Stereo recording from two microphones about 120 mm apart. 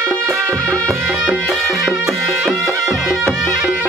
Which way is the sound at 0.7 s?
10° left (ahead or behind).